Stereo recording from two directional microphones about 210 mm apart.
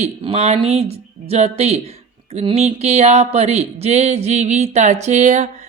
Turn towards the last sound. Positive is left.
turn(degrees=-35)  # may be behind; listen again after turning